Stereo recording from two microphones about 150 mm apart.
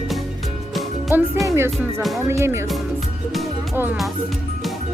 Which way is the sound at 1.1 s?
15° right (ahead or behind).